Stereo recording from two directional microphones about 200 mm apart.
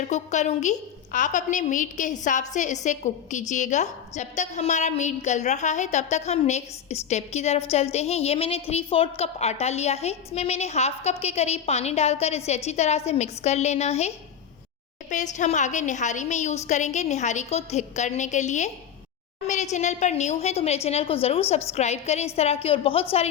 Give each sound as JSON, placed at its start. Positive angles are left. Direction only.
{"t": 0.1, "sound": "a woman's voice", "side_deg": 35}
{"t": 15.1, "sound": "a woman's voice", "side_deg": 35}